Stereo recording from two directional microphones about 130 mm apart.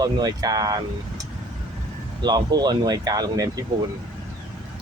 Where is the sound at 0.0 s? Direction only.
30° right (ahead or behind).